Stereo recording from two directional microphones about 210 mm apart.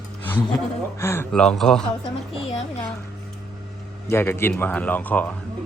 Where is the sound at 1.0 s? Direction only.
10° left (ahead or behind).